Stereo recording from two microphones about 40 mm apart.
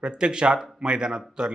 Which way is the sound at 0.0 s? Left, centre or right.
Right.